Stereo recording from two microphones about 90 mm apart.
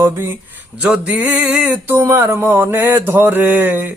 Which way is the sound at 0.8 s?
10° right (ahead or behind).